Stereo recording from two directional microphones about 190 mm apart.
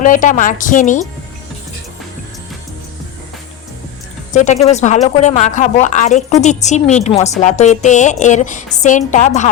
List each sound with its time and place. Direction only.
0.0 s speech: 45° left (ahead or behind)
4.4 s a woman's voice: 35° left (ahead or behind)